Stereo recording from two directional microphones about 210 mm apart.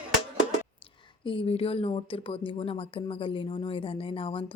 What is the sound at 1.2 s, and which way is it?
Speech, 25° left (ahead or behind).